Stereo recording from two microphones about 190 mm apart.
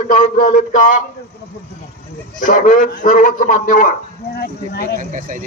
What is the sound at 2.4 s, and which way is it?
Speech, 40° left (ahead or behind).